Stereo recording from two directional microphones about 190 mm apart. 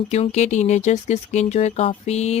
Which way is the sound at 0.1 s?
35° left (ahead or behind).